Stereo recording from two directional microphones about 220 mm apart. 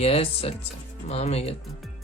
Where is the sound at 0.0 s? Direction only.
25° left (ahead or behind).